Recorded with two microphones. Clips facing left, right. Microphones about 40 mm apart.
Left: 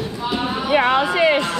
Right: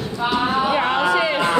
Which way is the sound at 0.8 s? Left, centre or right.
Left.